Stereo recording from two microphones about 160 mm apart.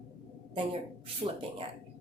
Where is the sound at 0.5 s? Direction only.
35° right (ahead or behind).